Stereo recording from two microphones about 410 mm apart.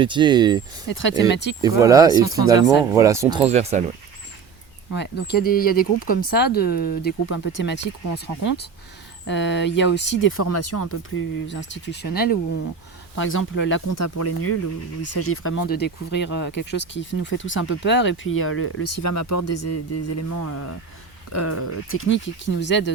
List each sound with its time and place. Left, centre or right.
0.0 s speech: centre
0.9 s speech: left
1.6 s speech: centre
4.9 s speech: left